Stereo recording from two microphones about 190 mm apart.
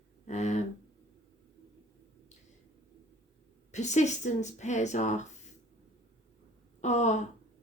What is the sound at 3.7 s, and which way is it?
Speech, 40° left (ahead or behind).